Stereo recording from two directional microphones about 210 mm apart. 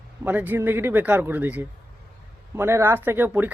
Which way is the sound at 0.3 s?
10° right (ahead or behind).